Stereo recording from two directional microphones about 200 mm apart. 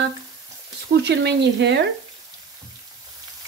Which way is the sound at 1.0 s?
60° right (ahead or behind).